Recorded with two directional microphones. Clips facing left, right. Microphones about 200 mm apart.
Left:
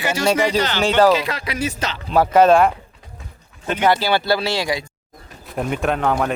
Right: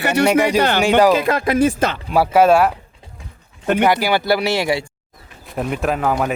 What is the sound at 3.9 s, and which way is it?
Speech, 15° right (ahead or behind).